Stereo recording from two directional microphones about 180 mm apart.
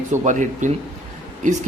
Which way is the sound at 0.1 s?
45° right (ahead or behind).